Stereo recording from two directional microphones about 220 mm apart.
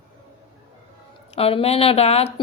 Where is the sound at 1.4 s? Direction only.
25° left (ahead or behind).